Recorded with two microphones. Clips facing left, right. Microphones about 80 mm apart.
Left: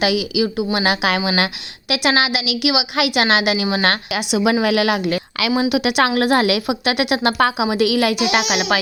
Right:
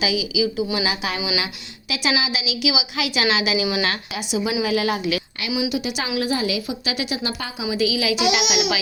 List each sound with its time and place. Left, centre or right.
0.0 s a woman's voice: left
3.8 s a woman's voice: left